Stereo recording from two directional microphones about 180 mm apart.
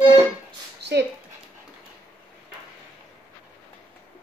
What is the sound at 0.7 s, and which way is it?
Dog, 70° right (ahead or behind).